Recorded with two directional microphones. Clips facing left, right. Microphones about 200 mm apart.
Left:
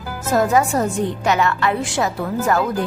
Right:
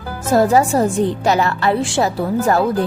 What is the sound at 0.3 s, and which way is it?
A woman's voice, 30° right (ahead or behind).